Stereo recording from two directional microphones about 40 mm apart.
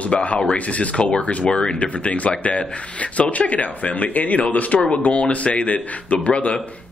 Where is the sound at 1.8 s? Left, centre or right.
Left.